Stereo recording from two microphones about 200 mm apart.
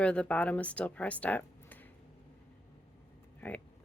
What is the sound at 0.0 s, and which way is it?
Speech, 5° left (ahead or behind).